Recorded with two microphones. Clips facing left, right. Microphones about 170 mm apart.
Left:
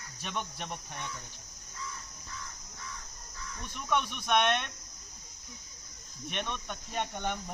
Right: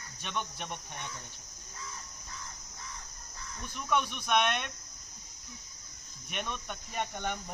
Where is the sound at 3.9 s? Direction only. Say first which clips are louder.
Even; centre (ahead or behind).